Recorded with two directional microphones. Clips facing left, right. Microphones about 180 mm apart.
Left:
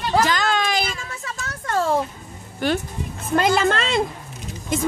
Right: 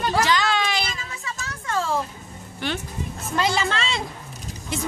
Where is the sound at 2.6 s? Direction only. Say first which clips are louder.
Left 6 dB; 45° left (ahead or behind).